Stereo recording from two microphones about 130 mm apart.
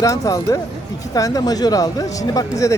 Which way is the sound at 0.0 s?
25° left (ahead or behind).